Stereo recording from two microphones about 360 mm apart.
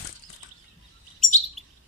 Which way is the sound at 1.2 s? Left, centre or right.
Centre.